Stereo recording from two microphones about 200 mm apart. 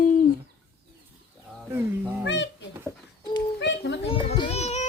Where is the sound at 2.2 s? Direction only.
60° left (ahead or behind).